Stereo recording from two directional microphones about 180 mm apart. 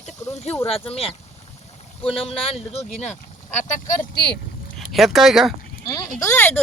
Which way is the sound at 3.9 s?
60° left (ahead or behind).